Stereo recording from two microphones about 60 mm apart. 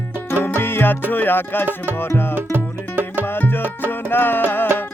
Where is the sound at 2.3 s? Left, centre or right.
Right.